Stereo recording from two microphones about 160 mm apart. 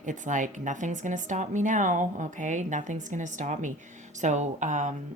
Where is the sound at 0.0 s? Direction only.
50° right (ahead or behind).